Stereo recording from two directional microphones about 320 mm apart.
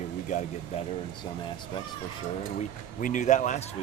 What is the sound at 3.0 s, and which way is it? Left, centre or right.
Speech, left.